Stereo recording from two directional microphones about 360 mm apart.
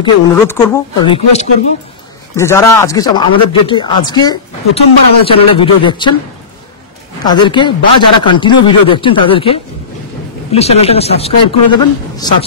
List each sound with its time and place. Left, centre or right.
0.0 s speech: centre
7.2 s speech: centre